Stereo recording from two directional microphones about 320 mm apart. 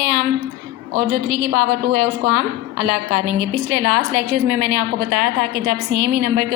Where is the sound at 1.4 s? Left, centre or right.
Right.